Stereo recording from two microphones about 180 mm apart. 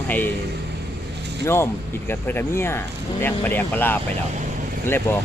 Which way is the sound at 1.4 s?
15° left (ahead or behind).